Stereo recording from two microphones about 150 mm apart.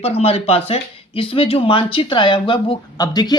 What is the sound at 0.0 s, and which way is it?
Speech, 40° left (ahead or behind).